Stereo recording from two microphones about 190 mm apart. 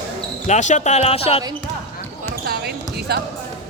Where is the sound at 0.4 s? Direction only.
40° left (ahead or behind).